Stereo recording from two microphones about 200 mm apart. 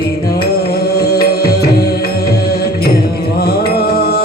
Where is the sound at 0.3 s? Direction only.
50° left (ahead or behind).